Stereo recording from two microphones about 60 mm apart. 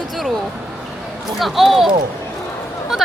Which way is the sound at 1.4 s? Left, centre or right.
Centre.